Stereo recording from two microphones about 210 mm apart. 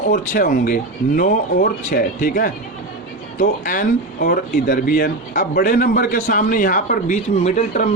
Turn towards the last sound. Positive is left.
turn(degrees=35)  # may be behind; listen again after turning